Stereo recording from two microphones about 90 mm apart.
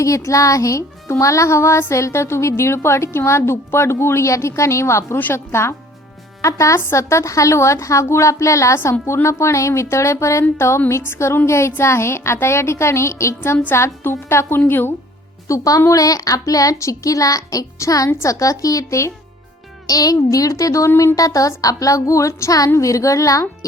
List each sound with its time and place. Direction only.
0.0 s a woman's voice: 35° left (ahead or behind)
15.4 s a woman's voice: 40° left (ahead or behind)